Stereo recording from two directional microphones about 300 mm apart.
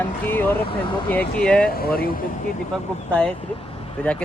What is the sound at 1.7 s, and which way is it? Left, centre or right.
Speech, left.